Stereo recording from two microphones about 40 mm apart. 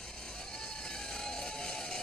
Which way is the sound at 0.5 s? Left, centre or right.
Centre.